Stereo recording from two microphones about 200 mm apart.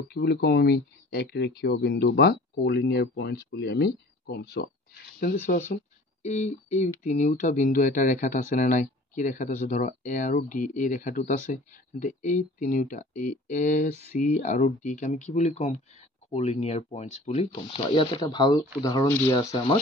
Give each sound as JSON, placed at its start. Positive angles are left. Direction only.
{"t": 0.1, "sound": "speech", "side_deg": 55}